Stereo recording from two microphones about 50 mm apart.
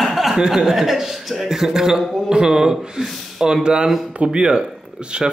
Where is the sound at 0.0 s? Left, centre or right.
Centre.